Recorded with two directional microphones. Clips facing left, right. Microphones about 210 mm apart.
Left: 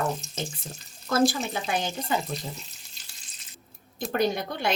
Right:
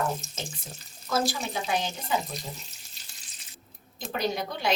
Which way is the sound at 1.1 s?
55° left (ahead or behind).